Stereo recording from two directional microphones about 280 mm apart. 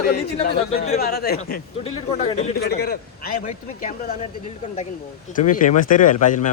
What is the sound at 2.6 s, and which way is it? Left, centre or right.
Speech, left.